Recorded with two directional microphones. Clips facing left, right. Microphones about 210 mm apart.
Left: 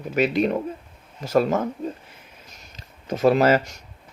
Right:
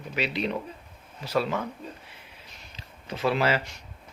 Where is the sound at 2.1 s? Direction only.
45° left (ahead or behind).